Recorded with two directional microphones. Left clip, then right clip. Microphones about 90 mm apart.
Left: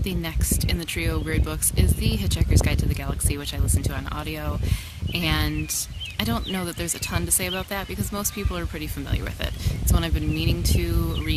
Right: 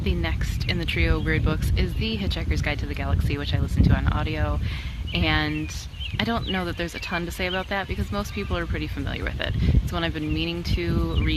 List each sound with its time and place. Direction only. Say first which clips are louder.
0.0 s speech: right 1 dB; 40° left (ahead or behind)
3.8 s speech: right 5 dB; 40° left (ahead or behind)
9.9 s speech: even; 45° left (ahead or behind)